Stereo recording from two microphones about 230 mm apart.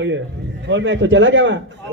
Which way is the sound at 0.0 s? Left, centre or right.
Right.